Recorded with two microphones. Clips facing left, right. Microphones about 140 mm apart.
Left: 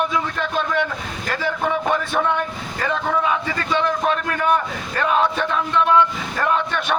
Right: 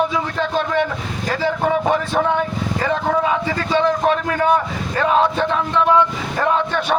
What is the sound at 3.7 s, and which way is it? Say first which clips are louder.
A man's voice: right 3 dB; 25° right (ahead or behind).